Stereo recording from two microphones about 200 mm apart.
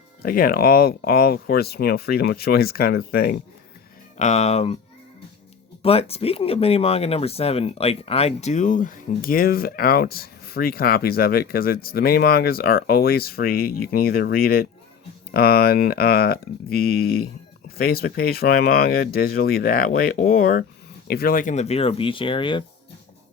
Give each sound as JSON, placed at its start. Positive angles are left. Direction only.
{"t": 0.2, "sound": "speech", "side_deg": 45}
{"t": 4.2, "sound": "speech", "side_deg": 35}
{"t": 5.8, "sound": "speech", "side_deg": 30}